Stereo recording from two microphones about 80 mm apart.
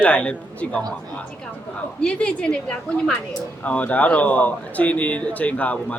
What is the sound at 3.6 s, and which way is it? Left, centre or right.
Speech, centre.